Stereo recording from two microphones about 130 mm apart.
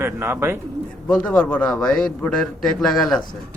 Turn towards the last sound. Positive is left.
turn(degrees=0)  # may be behind; listen again after turning